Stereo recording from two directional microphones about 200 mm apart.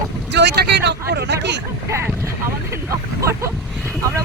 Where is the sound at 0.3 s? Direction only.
60° right (ahead or behind).